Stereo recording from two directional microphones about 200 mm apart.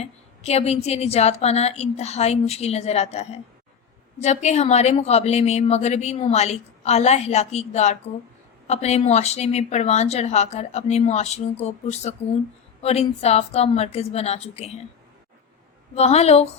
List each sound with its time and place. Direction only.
0.0 s a woman's voice: 30° left (ahead or behind)
16.0 s a woman's voice: 35° left (ahead or behind)